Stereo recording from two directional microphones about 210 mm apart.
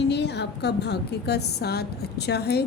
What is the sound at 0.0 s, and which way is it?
A woman's voice, 55° left (ahead or behind).